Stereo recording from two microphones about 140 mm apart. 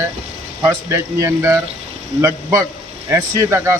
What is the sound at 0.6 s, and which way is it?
Speech, 20° right (ahead or behind).